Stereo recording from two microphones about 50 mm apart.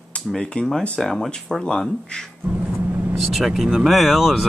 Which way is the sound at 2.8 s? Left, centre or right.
Right.